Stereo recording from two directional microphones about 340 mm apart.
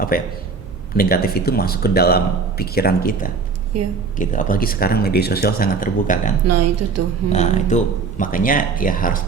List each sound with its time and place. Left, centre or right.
0.1 s speech: left
3.7 s a woman's voice: right
4.2 s speech: left
6.4 s a woman's voice: right
7.3 s speech: left